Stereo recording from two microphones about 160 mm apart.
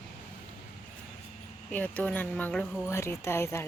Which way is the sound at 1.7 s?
10° left (ahead or behind).